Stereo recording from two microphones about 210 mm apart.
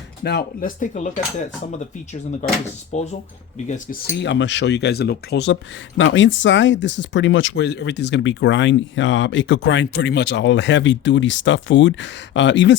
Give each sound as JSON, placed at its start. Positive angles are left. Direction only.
{"t": 0.2, "sound": "speech", "side_deg": 50}
{"t": 2.9, "sound": "speech", "side_deg": 30}
{"t": 4.2, "sound": "speech", "side_deg": 60}
{"t": 6.0, "sound": "speech", "side_deg": 65}